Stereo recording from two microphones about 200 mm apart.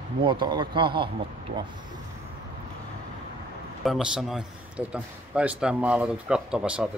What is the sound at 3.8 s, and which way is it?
A man's voice, centre (ahead or behind).